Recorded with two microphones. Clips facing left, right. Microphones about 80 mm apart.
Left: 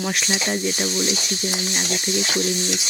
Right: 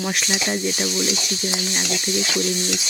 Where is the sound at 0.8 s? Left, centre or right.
Left.